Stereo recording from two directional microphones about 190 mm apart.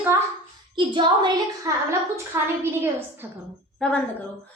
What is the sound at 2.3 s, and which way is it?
A woman's voice, 15° right (ahead or behind).